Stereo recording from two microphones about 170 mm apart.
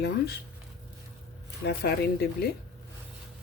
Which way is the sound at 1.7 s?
70° left (ahead or behind).